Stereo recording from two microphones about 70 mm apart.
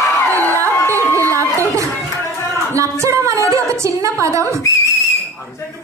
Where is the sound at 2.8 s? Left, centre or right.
Right.